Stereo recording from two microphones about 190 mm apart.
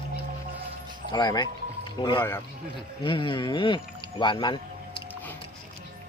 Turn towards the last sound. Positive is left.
turn(degrees=25)  # may be behind; listen again after turning